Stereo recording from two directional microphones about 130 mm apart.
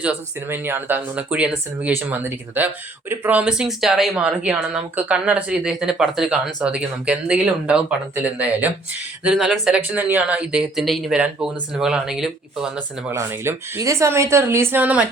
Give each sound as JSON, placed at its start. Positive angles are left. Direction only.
{"t": 0.4, "sound": "speech", "side_deg": -15}
{"t": 13.1, "sound": "speech", "side_deg": -20}